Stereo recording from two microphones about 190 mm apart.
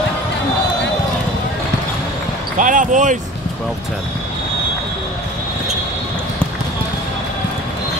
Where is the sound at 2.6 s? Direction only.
45° right (ahead or behind).